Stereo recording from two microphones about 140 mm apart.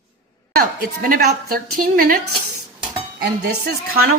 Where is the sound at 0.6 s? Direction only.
85° right.